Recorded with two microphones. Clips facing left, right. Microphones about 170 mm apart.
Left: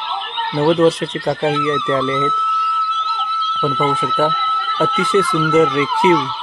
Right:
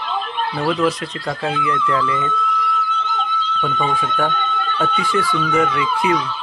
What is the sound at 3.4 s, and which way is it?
Speech, 30° left (ahead or behind).